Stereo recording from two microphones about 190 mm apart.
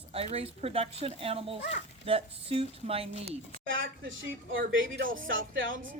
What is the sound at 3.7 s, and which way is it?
Speech, 85° right.